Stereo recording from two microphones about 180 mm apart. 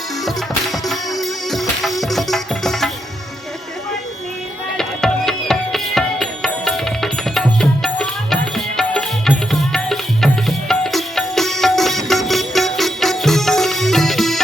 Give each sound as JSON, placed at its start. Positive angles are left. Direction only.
{"t": 0.3, "sound": "music", "side_deg": 0}
{"t": 4.8, "sound": "music", "side_deg": 0}